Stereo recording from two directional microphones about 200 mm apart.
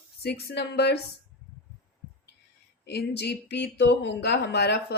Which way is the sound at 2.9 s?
55° left (ahead or behind).